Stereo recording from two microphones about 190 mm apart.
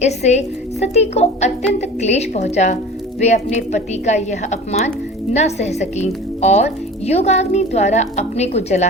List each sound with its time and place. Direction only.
0.0 s speech: 35° left (ahead or behind)